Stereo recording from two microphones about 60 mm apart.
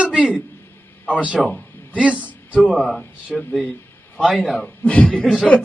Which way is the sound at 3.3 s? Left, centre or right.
Centre.